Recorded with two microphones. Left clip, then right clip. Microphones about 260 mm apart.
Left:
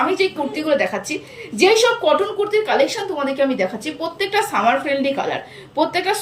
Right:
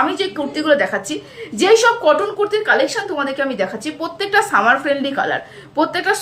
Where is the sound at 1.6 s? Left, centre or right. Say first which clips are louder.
Right 2 dB; centre.